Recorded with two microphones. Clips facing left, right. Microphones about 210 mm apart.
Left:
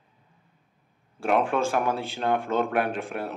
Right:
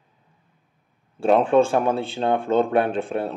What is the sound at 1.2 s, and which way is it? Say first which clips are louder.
Speech: right 7 dB; 30° right (ahead or behind).